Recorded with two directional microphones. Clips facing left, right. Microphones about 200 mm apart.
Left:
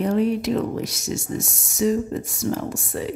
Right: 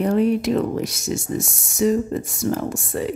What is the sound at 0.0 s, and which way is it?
Speech, 55° right (ahead or behind).